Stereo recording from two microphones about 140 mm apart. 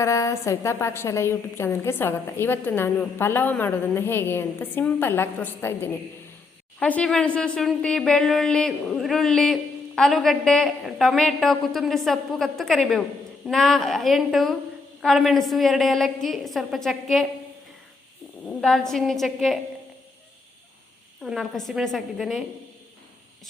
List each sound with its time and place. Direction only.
0.0 s a woman's voice: 20° left (ahead or behind); by 17.2 s centre (ahead or behind)
18.4 s speech: 5° left (ahead or behind)
21.2 s speech: centre (ahead or behind)